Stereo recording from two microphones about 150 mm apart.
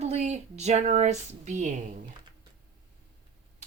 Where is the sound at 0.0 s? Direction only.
50° right (ahead or behind).